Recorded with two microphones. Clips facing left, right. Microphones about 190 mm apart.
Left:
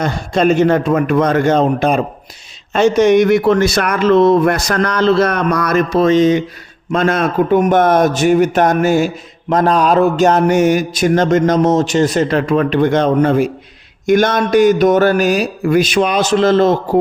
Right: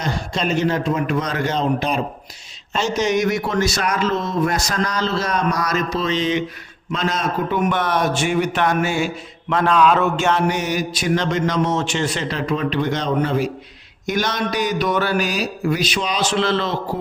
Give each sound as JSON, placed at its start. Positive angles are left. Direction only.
{"t": 0.0, "sound": "speech", "side_deg": 55}
{"t": 6.9, "sound": "speech", "side_deg": 55}
{"t": 7.6, "sound": "speech", "side_deg": 45}
{"t": 9.5, "sound": "a sound", "side_deg": 40}
{"t": 10.4, "sound": "speech", "side_deg": 50}